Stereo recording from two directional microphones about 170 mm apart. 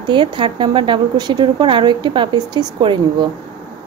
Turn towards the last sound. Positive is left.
turn(degrees=-25)  # may be behind; listen again after turning